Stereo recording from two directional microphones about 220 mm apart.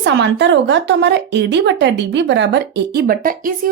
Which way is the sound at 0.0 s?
50° right (ahead or behind).